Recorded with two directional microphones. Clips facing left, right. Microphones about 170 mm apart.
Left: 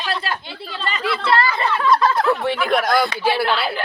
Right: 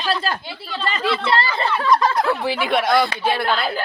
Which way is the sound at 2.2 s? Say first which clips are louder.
Left 2 dB; centre (ahead or behind).